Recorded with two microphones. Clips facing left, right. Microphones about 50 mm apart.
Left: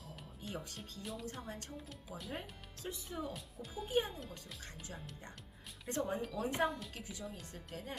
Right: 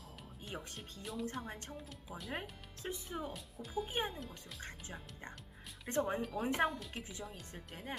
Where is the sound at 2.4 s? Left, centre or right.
Right.